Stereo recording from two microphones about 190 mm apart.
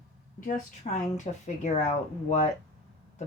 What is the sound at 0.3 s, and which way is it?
Speech, 45° left (ahead or behind).